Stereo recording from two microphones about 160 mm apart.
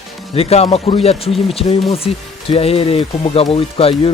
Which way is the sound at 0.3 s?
40° left (ahead or behind).